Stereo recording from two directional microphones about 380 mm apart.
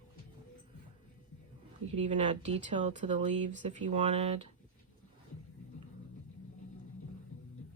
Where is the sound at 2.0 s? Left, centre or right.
Centre.